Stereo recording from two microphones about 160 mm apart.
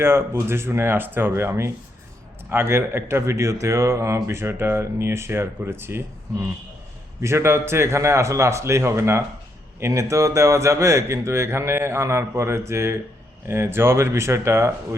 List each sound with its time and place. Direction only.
0.0 s speech: 15° right (ahead or behind)
7.2 s speech: 15° right (ahead or behind)